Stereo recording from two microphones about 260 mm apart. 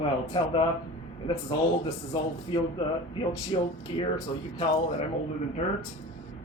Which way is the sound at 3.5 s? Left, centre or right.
Centre.